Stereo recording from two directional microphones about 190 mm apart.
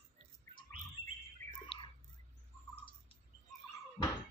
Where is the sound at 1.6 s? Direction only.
25° left (ahead or behind).